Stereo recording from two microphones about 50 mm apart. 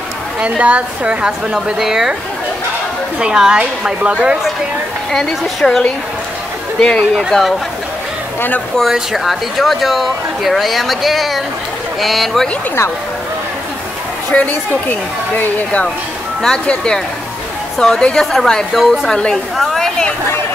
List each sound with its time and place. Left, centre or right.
0.4 s a woman's voice: right
3.2 s a woman's voice: centre
5.1 s speech: centre
7.2 s speech: centre
8.9 s speech: centre
14.3 s speech: left
16.4 s speech: centre
17.7 s a woman's voice: centre